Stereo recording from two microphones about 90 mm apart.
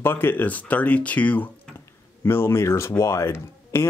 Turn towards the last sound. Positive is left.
turn(degrees=30)  # may be behind; listen again after turning